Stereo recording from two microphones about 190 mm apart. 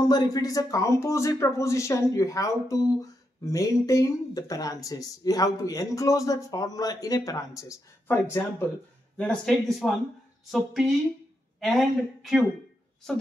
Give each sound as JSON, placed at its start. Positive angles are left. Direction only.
{"t": 0.0, "sound": "speech", "side_deg": 20}